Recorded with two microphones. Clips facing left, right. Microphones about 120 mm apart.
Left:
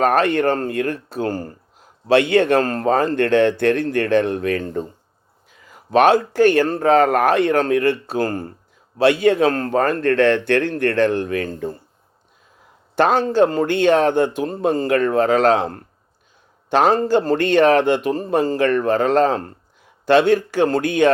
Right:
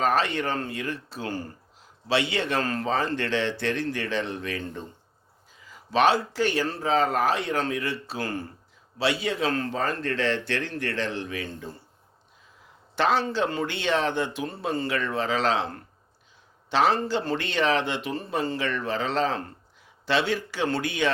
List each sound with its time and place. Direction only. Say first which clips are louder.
0.0 s a man's voice: left 8 dB; 55° left (ahead or behind)
13.0 s a man's voice: left 8 dB; 50° left (ahead or behind)